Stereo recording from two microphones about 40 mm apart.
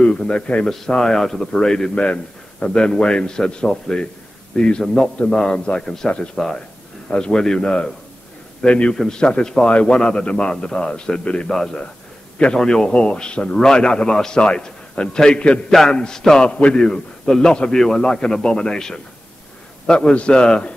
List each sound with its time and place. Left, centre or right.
0.7 s a man's voice: centre
7.1 s a man's voice: left
8.6 s a man's voice: left
8.9 s a man's voice: centre
11.4 s a man's voice: centre; by 15.6 s left
15.7 s speech: centre
16.4 s a man's voice: left
16.7 s a man's voice: centre